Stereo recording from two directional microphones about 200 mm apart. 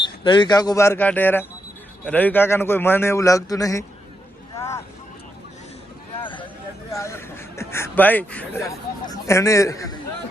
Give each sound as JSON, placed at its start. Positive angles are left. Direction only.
{"t": 0.0, "sound": "a man's voice", "side_deg": 25}
{"t": 4.5, "sound": "vehicle", "side_deg": 15}
{"t": 6.2, "sound": "a sound", "side_deg": 25}
{"t": 6.9, "sound": "speech", "side_deg": 15}